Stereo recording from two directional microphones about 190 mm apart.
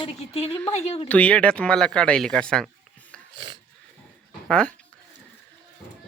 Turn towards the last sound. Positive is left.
turn(degrees=5)  # may be behind; listen again after turning